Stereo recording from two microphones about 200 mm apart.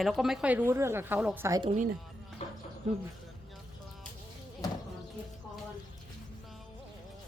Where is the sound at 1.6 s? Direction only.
35° right (ahead or behind).